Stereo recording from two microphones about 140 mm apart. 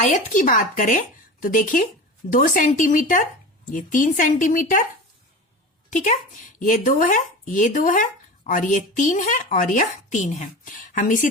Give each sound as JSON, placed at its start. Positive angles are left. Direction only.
{"t": 0.0, "sound": "speech", "side_deg": 65}
{"t": 5.9, "sound": "speech", "side_deg": 55}